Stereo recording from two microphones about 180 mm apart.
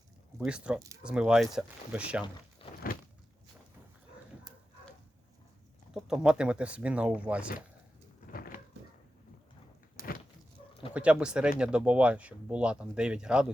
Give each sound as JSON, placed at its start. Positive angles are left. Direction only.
{"t": 0.3, "sound": "speech", "side_deg": -5}
{"t": 2.6, "sound": "a sound", "side_deg": 30}
{"t": 5.9, "sound": "speech", "side_deg": -5}
{"t": 8.3, "sound": "a sound", "side_deg": 55}
{"t": 10.0, "sound": "power windows", "side_deg": -15}
{"t": 10.9, "sound": "speech", "side_deg": -5}